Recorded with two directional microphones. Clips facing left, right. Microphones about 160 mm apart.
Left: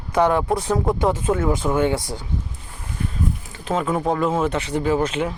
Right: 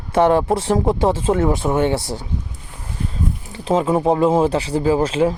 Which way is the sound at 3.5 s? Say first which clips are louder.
Right 6 dB; 30° right (ahead or behind).